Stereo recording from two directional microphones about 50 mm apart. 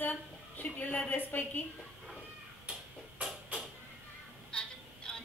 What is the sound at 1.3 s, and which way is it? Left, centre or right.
Speech, left.